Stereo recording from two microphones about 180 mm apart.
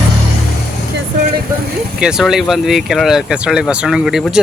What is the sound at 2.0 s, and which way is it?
Speech, 5° right (ahead or behind).